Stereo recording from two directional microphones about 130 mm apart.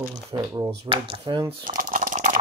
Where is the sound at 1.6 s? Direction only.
90° right.